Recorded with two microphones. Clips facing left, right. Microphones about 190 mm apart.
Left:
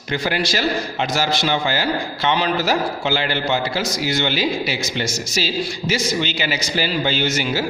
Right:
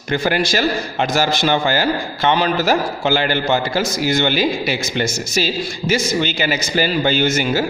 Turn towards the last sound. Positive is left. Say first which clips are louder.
# right 4 dB
turn(degrees=-50)  # may be behind; listen again after turning